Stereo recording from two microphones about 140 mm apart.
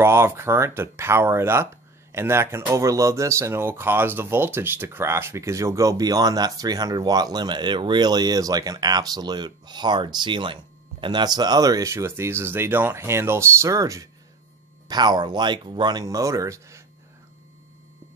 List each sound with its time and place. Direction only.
0.0 s speech: 20° right (ahead or behind)